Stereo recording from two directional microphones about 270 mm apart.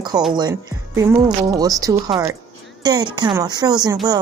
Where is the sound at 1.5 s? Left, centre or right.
Centre.